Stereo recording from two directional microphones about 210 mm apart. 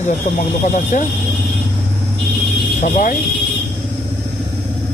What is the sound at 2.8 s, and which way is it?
Speech, 35° left (ahead or behind).